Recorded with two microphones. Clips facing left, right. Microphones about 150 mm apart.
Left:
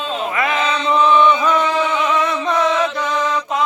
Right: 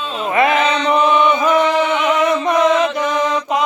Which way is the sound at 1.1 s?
15° right (ahead or behind).